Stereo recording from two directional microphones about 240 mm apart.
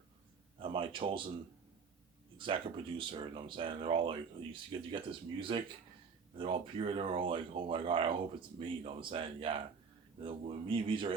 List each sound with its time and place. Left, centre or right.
0.6 s speech: right
2.4 s speech: right